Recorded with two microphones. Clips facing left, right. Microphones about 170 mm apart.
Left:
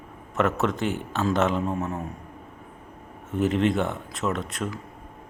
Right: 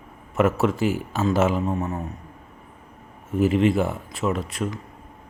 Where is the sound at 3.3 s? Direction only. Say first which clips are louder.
Right 3 dB; centre (ahead or behind).